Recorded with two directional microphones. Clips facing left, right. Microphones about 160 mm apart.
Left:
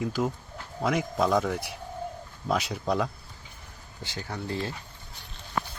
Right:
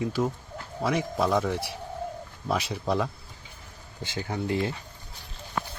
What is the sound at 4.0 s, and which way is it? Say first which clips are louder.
Speech: right 5 dB; 20° right (ahead or behind).